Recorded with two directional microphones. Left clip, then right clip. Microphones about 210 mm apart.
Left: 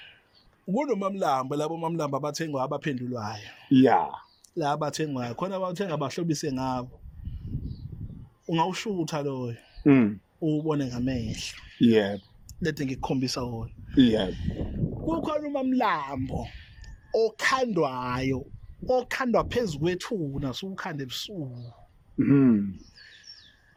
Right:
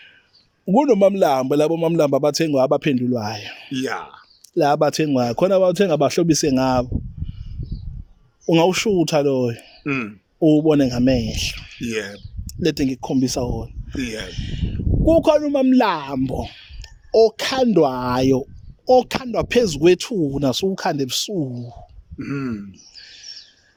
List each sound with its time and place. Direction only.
0.6 s speech: 45° right (ahead or behind)
3.7 s speech: 15° left (ahead or behind)
4.5 s speech: 45° right (ahead or behind)
8.4 s speech: 50° right (ahead or behind)
22.3 s a man's voice: 20° left (ahead or behind)
23.0 s bird: 50° right (ahead or behind)